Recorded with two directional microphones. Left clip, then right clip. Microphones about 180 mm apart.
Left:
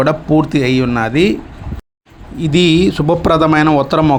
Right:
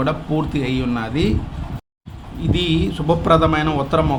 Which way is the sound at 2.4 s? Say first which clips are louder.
Left 9 dB; 45° left (ahead or behind).